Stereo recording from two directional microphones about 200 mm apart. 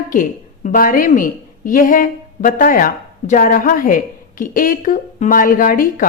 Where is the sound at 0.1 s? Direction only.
40° left (ahead or behind).